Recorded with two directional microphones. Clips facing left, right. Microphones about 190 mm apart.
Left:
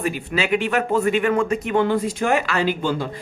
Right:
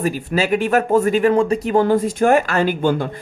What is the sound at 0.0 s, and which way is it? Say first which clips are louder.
Speech: right 4 dB; 40° right (ahead or behind).